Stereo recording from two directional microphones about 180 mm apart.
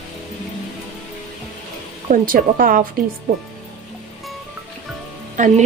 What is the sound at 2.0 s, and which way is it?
Speech, 50° right (ahead or behind).